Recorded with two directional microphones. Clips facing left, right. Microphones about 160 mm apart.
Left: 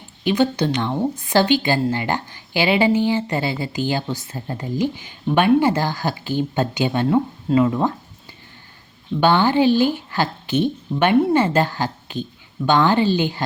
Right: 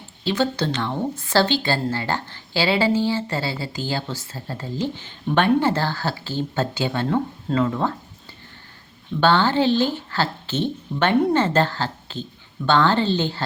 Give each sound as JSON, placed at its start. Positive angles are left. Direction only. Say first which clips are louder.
{"t": 0.3, "sound": "a woman's voice", "louder": "left 4 dB", "side_deg": 15}
{"t": 9.2, "sound": "a woman's voice", "louder": "left 2 dB", "side_deg": 15}